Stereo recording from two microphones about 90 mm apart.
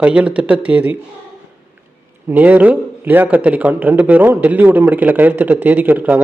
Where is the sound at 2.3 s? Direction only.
20° right (ahead or behind).